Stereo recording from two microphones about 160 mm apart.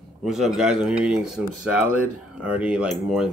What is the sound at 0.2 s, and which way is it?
Speech, centre (ahead or behind).